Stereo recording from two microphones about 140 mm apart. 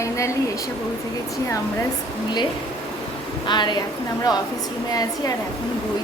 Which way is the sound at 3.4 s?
30° left (ahead or behind).